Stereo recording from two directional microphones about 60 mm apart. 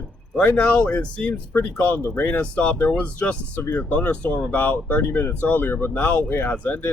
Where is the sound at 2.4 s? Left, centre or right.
Centre.